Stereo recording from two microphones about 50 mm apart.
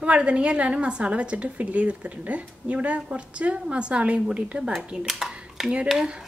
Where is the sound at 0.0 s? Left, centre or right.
Right.